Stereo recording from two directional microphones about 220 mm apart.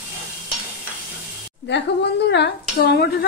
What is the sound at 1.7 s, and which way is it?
Speech, 55° left (ahead or behind).